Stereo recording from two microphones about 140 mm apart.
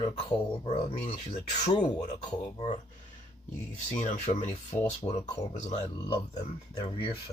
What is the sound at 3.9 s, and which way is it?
Speech, 60° left (ahead or behind).